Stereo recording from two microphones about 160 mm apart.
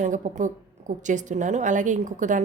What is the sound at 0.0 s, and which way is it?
A woman's voice, 50° right (ahead or behind).